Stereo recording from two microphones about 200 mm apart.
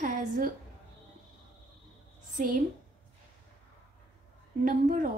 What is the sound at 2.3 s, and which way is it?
Speech, 40° right (ahead or behind).